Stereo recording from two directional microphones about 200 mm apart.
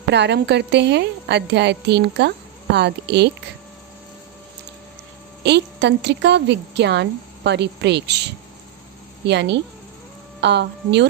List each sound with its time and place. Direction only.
0.1 s a woman's voice: 60° right (ahead or behind)
5.4 s a woman's voice: 60° right (ahead or behind)